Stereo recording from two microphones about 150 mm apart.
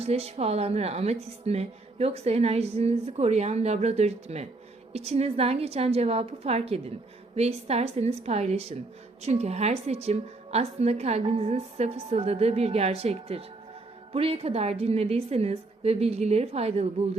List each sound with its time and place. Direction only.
0.0 s speech: 45° right (ahead or behind)